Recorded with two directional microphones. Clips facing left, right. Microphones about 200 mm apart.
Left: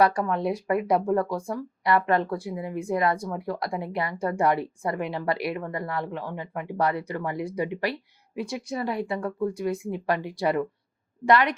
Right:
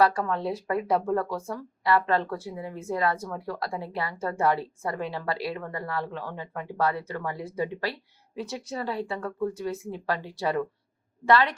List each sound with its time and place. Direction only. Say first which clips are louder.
0.0 s speech: left 1 dB; 15° left (ahead or behind)